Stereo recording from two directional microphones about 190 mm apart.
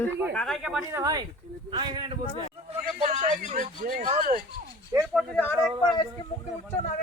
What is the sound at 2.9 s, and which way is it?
Speech, 40° right (ahead or behind).